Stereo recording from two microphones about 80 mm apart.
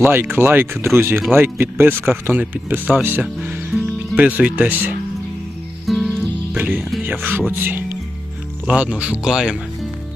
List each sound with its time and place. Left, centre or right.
0.0 s speech: right
3.7 s music: centre
4.2 s speech: centre
5.8 s music: centre
6.5 s speech: right
8.6 s speech: centre